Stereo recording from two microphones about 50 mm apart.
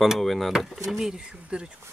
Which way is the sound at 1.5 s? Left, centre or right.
Right.